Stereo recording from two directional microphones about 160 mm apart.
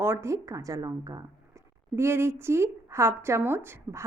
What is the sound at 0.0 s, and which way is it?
A woman's voice, 15° right (ahead or behind).